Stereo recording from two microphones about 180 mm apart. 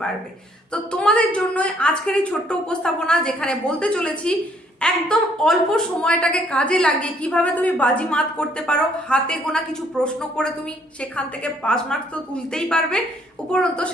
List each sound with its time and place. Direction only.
0.7 s a woman's voice: 5° left (ahead or behind)